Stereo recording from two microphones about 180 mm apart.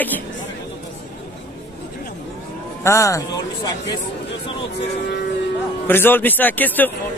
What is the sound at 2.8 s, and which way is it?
Speech, 15° left (ahead or behind).